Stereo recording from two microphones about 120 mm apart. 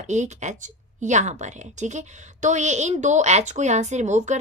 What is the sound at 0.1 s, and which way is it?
A woman's voice, 75° right (ahead or behind).